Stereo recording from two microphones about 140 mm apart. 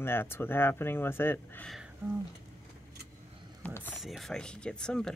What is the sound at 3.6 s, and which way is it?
Speech, 10° left (ahead or behind).